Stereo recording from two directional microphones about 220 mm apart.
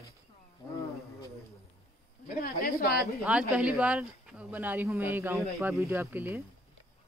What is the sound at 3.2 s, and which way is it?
Speech, 5° right (ahead or behind).